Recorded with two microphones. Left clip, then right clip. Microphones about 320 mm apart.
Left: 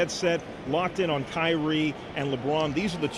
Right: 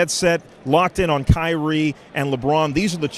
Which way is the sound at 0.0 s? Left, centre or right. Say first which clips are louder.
Right 7 dB; right.